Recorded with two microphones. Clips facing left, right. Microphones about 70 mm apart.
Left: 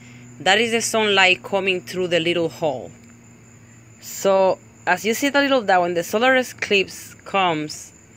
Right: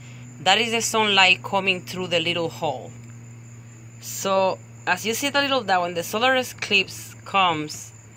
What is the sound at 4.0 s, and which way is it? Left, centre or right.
Speech, left.